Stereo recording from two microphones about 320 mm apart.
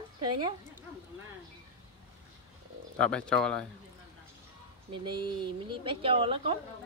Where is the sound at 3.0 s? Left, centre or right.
Centre.